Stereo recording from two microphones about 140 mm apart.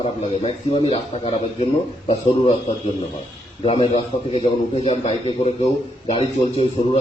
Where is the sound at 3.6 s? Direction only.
40° left (ahead or behind).